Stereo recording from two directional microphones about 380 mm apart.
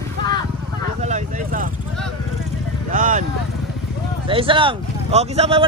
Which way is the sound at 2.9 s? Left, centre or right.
Centre.